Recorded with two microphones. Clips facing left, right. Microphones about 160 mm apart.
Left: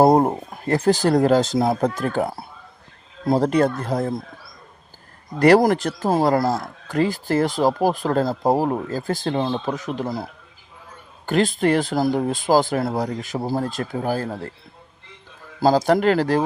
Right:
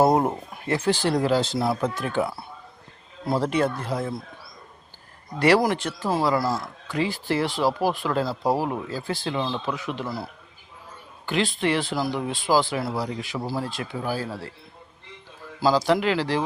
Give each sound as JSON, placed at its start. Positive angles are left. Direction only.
{"t": 0.0, "sound": "speech", "side_deg": 35}
{"t": 5.4, "sound": "speech", "side_deg": 45}
{"t": 11.3, "sound": "speech", "side_deg": 45}
{"t": 15.6, "sound": "speech", "side_deg": 50}